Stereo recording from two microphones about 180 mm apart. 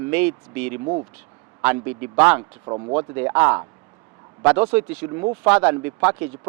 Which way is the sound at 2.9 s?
15° right (ahead or behind).